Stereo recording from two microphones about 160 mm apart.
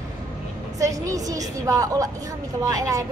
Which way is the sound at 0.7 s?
20° right (ahead or behind).